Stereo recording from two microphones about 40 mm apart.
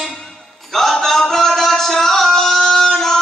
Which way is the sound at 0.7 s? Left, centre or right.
Centre.